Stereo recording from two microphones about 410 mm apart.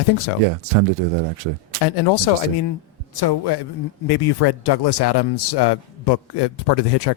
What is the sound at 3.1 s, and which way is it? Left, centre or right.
A man's voice, left.